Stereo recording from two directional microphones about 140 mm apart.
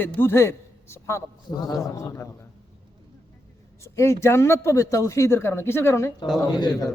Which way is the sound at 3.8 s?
20° left (ahead or behind).